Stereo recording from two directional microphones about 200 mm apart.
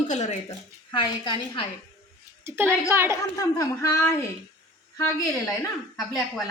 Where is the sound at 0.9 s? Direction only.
20° left (ahead or behind).